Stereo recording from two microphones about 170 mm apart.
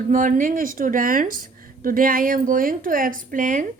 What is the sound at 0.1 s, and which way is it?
A woman's voice, 50° right (ahead or behind).